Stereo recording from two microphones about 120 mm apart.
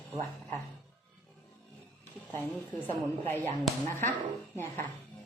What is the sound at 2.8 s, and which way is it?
Speech, 15° left (ahead or behind).